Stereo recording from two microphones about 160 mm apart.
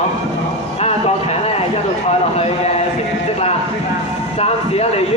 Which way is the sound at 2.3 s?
40° left (ahead or behind).